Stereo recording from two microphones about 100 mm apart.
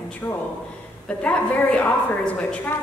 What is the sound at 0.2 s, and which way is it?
A woman's voice, 15° left (ahead or behind).